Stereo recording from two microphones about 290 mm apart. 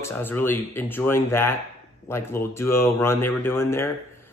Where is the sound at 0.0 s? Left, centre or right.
Centre.